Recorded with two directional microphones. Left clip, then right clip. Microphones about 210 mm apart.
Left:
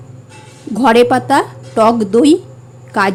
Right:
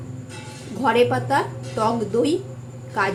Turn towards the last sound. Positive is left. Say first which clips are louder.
# left 8 dB
turn(degrees=45)  # may be behind; listen again after turning